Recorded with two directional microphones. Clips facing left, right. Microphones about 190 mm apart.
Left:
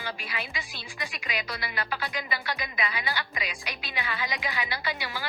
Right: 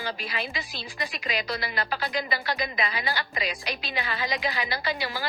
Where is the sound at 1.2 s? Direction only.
35° right (ahead or behind).